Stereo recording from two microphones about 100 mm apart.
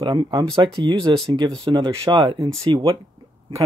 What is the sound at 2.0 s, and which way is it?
Speech, 55° right (ahead or behind).